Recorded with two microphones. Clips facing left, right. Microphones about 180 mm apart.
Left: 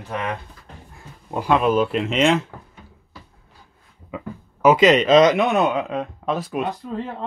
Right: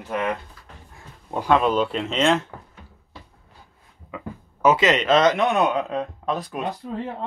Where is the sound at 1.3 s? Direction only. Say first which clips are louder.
Left 1 dB; 5° left (ahead or behind).